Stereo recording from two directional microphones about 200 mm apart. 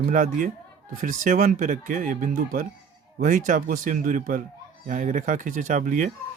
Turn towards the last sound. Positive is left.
turn(degrees=-40)  # may be behind; listen again after turning